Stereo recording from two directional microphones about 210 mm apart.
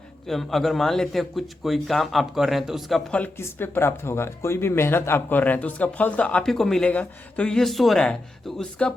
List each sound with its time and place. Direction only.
0.3 s a man's voice: centre (ahead or behind)